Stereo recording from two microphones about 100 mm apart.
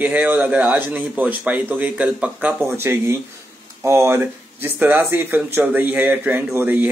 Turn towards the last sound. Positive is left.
turn(degrees=-20)  # may be behind; listen again after turning